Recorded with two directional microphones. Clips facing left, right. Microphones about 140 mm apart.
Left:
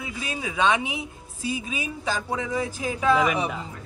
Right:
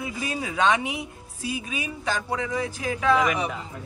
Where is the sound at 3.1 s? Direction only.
Centre (ahead or behind).